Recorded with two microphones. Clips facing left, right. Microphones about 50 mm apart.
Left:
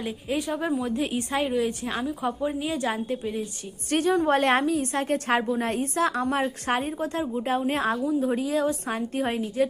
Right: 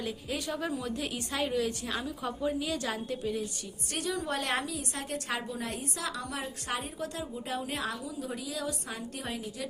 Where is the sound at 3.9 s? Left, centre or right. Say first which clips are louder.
Left 12 dB; left.